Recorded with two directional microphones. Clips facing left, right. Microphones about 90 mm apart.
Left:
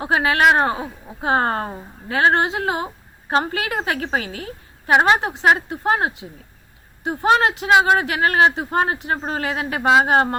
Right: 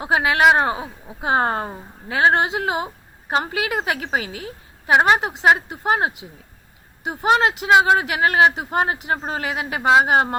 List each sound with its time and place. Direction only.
0.0 s a woman's voice: 20° right (ahead or behind)